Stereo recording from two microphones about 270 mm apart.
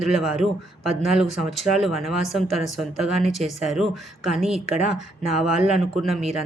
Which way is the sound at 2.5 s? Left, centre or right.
Right.